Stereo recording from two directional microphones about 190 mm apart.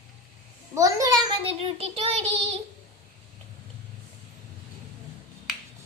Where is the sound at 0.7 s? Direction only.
15° right (ahead or behind); by 2.4 s 30° right (ahead or behind).